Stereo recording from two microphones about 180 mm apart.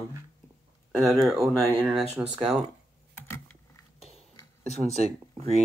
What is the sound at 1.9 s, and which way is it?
Speech, 5° right (ahead or behind).